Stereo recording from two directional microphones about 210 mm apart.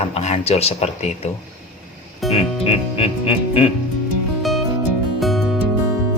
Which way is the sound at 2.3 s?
25° left (ahead or behind).